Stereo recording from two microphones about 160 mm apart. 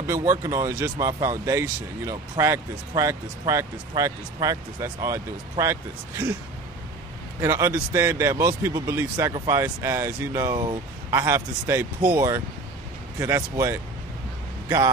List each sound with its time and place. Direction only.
0.0 s speech: 20° right (ahead or behind)
7.3 s speech: 15° right (ahead or behind)